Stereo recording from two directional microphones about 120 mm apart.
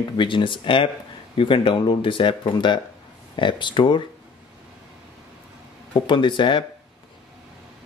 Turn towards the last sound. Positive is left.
turn(degrees=40)  # may be behind; listen again after turning